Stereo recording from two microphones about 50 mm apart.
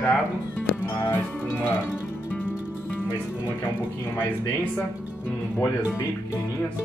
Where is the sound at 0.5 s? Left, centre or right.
Left.